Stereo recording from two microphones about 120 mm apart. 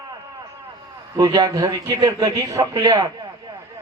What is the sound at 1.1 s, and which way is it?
A man's voice, 30° right (ahead or behind).